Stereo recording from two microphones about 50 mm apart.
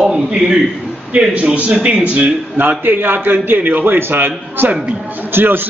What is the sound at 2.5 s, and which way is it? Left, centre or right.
A man's voice, right.